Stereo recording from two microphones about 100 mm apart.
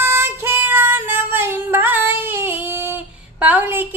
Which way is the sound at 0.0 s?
25° right (ahead or behind).